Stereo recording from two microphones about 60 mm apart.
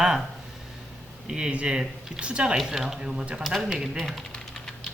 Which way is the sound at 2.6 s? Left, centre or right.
Centre.